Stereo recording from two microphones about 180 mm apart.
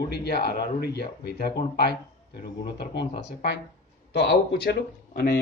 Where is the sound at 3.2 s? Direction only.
70° left (ahead or behind).